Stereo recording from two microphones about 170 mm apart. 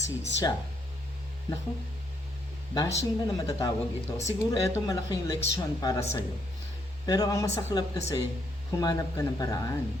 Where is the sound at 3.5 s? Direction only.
20° left (ahead or behind).